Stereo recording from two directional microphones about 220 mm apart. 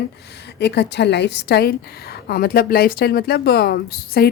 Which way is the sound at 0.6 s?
50° left (ahead or behind).